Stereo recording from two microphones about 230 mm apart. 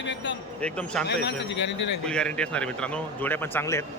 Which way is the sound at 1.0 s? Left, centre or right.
Left.